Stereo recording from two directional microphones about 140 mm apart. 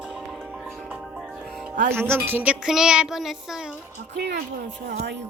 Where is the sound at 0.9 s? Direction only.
5° right (ahead or behind).